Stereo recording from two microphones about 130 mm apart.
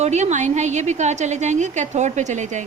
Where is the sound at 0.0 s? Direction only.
60° right (ahead or behind).